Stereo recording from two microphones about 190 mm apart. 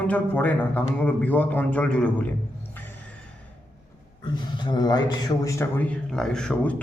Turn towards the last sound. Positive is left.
turn(degrees=5)  # may be behind; listen again after turning